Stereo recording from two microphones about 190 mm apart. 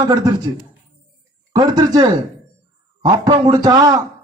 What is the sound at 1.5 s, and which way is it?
A man's voice, 20° right (ahead or behind).